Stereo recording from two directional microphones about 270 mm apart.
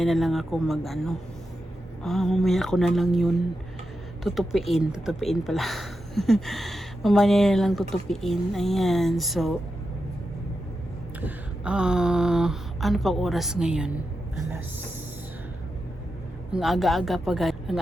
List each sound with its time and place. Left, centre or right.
0.0 s speech: centre
11.3 s speech: centre
16.5 s speech: centre